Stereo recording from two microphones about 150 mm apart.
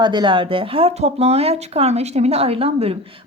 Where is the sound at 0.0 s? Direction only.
30° right (ahead or behind).